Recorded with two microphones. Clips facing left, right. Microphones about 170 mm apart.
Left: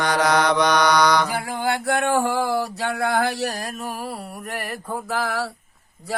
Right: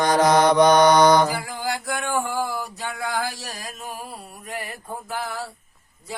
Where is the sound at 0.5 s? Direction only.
45° right (ahead or behind).